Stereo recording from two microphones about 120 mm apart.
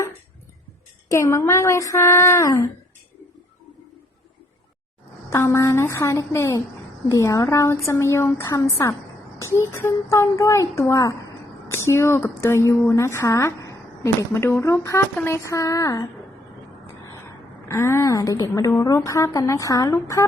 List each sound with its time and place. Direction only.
1.0 s speech: 25° left (ahead or behind)
5.3 s speech: 25° left (ahead or behind)
17.7 s speech: 25° left (ahead or behind)